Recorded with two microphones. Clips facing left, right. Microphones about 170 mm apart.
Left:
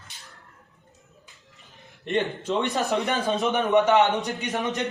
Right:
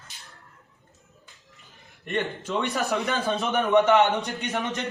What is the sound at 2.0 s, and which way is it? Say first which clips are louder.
A man's voice: left 3 dB; 20° left (ahead or behind).